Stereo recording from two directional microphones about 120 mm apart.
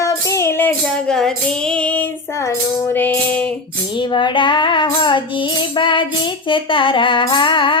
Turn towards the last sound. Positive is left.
turn(degrees=45)  # may be behind; listen again after turning